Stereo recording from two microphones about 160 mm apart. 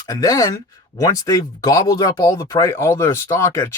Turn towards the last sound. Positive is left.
turn(degrees=20)  # may be behind; listen again after turning